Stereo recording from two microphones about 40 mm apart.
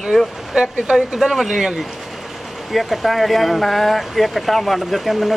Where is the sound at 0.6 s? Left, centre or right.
Centre.